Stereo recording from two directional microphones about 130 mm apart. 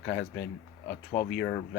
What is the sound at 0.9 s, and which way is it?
Speech, 90° left.